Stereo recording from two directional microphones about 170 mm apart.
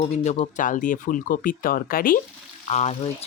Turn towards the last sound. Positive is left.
turn(degrees=40)  # may be behind; listen again after turning